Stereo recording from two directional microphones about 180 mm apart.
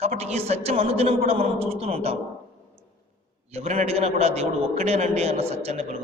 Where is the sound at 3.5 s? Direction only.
40° right (ahead or behind).